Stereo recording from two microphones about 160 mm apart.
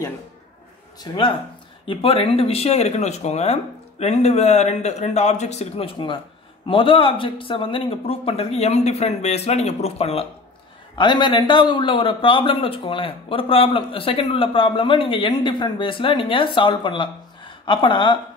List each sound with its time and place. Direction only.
1.1 s a man's voice: 25° left (ahead or behind)
11.0 s a man's voice: 30° left (ahead or behind)